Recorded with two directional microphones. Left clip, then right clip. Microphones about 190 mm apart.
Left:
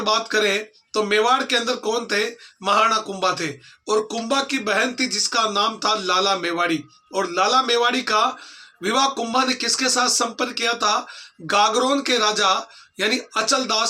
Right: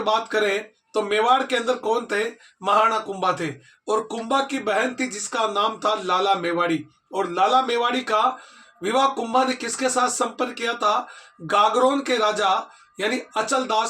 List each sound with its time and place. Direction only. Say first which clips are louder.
0.0 s speech: left 1 dB; 15° left (ahead or behind)